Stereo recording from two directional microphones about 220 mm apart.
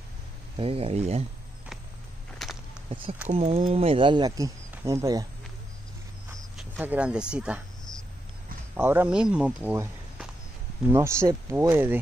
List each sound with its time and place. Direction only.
0.6 s speech: 25° right (ahead or behind)
2.4 s whip: centre (ahead or behind)
3.3 s speech: 25° right (ahead or behind)
6.6 s speech: 5° right (ahead or behind)